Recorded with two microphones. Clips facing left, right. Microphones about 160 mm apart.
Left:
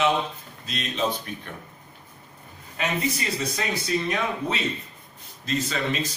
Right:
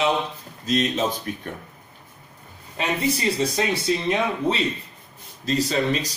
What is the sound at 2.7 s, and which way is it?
Speech, 30° right (ahead or behind).